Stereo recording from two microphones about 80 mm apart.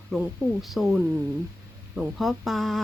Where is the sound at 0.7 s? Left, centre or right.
Centre.